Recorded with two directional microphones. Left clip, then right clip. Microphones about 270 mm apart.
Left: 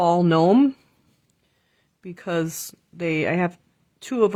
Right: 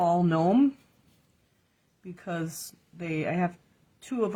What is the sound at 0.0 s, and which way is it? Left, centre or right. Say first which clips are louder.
Speech: left 6 dB; left.